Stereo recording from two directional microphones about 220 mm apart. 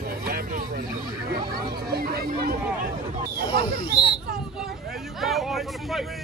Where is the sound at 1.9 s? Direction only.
45° right (ahead or behind).